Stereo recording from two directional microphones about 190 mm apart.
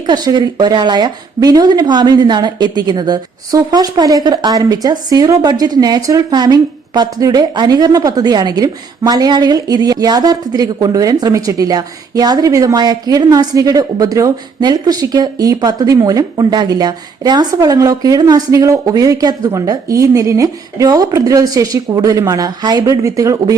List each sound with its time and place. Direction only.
0.1 s speech: 20° right (ahead or behind)